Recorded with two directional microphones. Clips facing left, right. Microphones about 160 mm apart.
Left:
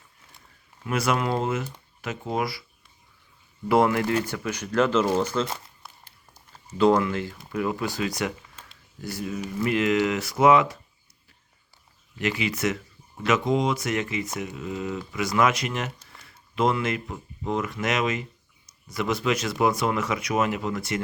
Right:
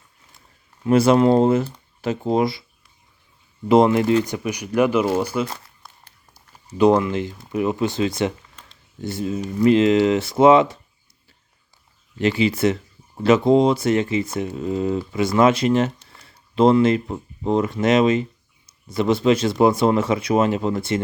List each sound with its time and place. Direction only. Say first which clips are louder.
0.9 s speech: right 11 dB; 30° right (ahead or behind)
3.7 s speech: right 6 dB; 20° right (ahead or behind)
12.2 s speech: right 8 dB; 30° right (ahead or behind)